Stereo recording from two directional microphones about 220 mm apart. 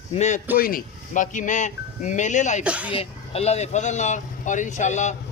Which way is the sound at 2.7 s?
5° right (ahead or behind).